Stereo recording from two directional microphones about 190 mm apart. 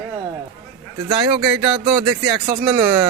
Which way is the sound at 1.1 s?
25° right (ahead or behind).